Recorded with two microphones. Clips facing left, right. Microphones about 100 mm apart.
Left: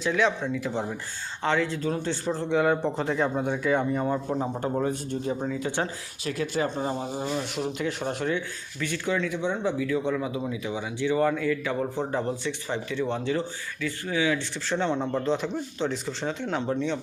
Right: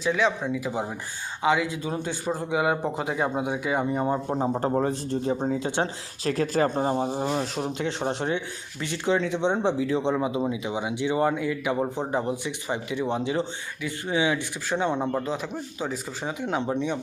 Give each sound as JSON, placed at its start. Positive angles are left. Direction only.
{"t": 0.0, "sound": "speech", "side_deg": 0}
{"t": 4.0, "sound": "speech", "side_deg": -25}
{"t": 5.5, "sound": "speech", "side_deg": -25}
{"t": 6.2, "sound": "speech", "side_deg": -40}